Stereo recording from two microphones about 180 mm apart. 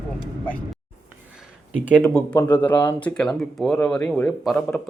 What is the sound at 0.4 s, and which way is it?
Speech, 5° left (ahead or behind).